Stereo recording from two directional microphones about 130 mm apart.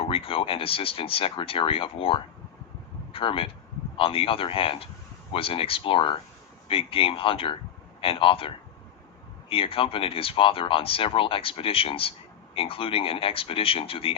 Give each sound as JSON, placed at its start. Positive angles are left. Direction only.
{"t": 0.1, "sound": "a man's voice", "side_deg": 45}